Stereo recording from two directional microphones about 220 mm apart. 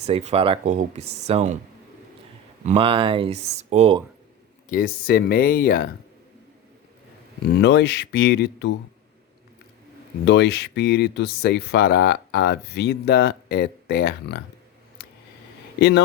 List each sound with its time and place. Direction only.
0.0 s speech: 30° right (ahead or behind)
2.6 s speech: 25° right (ahead or behind)
4.7 s speech: 40° left (ahead or behind)
7.6 s speech: 50° left (ahead or behind)
10.2 s speech: 50° left (ahead or behind)